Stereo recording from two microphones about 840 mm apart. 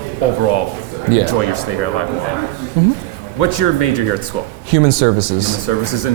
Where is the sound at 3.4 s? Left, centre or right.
Left.